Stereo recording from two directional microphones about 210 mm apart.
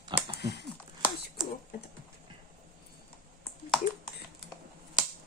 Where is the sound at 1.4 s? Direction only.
Centre (ahead or behind).